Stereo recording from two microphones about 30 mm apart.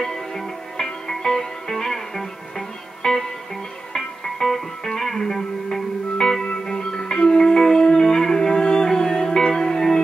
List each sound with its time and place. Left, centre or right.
0.0 s music: centre